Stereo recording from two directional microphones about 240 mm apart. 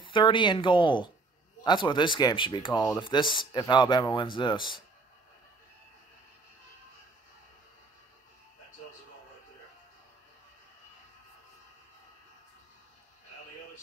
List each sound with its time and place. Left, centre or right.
0.0 s speech: centre